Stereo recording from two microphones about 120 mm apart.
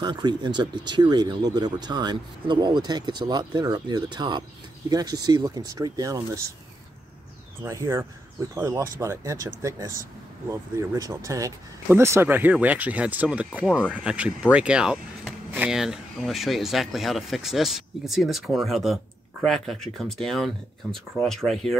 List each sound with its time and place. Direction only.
0.0 s speech: 40° right (ahead or behind)
7.6 s speech: 25° right (ahead or behind); by 21.7 s 5° left (ahead or behind)